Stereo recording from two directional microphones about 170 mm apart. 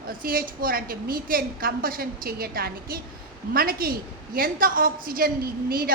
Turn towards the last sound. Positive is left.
turn(degrees=-60)  # may be behind; listen again after turning